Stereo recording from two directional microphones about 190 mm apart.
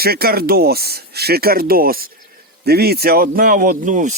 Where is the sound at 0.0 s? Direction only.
55° right (ahead or behind).